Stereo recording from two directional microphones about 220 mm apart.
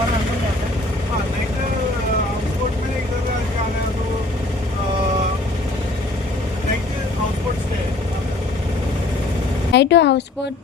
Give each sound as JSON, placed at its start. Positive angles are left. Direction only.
{"t": 9.7, "sound": "a woman's voice", "side_deg": 50}